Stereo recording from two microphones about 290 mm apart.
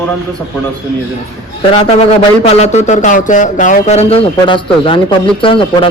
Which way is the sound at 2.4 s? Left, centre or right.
Left.